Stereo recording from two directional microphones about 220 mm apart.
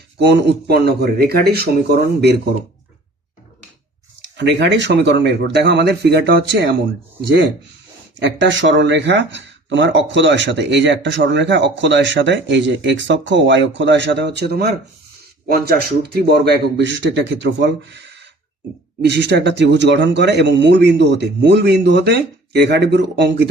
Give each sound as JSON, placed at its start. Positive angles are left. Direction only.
{"t": 0.2, "sound": "speech", "side_deg": -50}
{"t": 4.4, "sound": "speech", "side_deg": -50}
{"t": 8.2, "sound": "speech", "side_deg": -55}
{"t": 19.0, "sound": "speech", "side_deg": -50}